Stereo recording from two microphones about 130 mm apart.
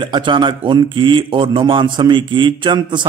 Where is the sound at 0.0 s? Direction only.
35° right (ahead or behind).